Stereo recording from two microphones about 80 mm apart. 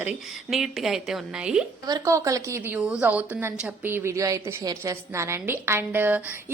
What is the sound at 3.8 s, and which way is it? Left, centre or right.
Speech, right.